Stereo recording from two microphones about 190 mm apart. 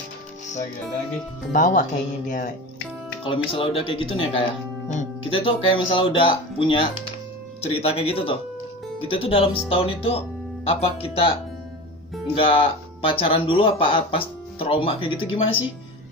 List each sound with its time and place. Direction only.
1.5 s speech: 45° left (ahead or behind)
3.3 s speech: 30° left (ahead or behind)
12.4 s speech: 30° left (ahead or behind)